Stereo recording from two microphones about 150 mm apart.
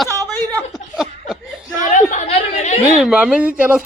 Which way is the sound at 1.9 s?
55° left (ahead or behind).